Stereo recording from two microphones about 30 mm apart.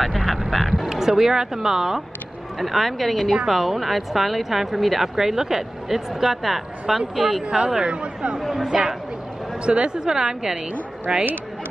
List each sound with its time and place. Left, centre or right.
0.0 s vehicle: centre
0.8 s speech: centre
2.6 s speech: centre
7.4 s speech: right
8.4 s speech: centre
8.6 s speech: right
9.7 s a woman's voice: right